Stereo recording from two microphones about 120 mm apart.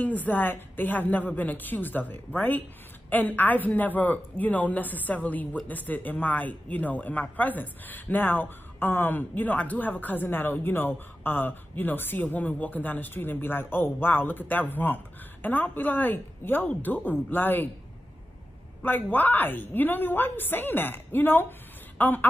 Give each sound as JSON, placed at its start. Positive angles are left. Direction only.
{"t": 0.0, "sound": "speech", "side_deg": 15}
{"t": 18.8, "sound": "speech", "side_deg": 15}